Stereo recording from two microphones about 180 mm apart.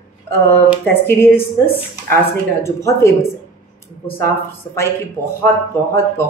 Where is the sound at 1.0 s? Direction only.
10° left (ahead or behind).